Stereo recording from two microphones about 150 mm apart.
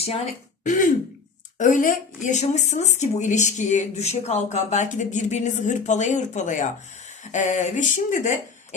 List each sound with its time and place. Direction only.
0.6 s speech: 60° left (ahead or behind)